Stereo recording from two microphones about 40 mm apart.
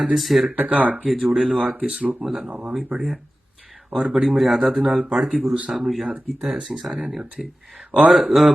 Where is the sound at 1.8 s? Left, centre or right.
Centre.